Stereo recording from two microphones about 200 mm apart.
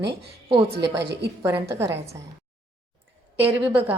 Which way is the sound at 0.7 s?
60° right (ahead or behind).